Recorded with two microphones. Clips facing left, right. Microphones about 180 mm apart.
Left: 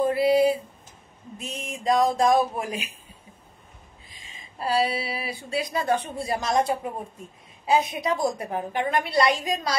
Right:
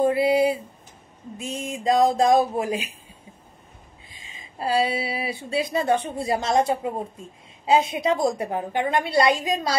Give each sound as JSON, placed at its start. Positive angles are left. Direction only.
{"t": 0.0, "sound": "a woman's voice", "side_deg": -25}
{"t": 4.6, "sound": "a woman's voice", "side_deg": -25}